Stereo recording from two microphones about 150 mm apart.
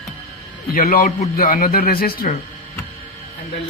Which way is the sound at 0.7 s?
75° left (ahead or behind).